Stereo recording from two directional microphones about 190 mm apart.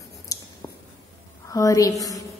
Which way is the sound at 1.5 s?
15° left (ahead or behind).